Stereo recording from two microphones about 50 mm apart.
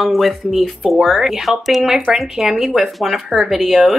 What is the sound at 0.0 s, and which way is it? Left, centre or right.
A woman's voice, centre.